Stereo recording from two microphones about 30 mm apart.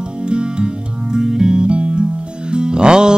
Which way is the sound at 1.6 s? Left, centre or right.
Right.